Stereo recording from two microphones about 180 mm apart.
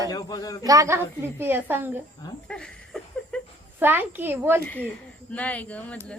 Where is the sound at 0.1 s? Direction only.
20° left (ahead or behind).